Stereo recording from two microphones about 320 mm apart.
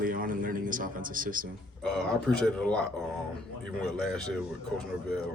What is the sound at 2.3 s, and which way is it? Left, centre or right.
Speech, centre.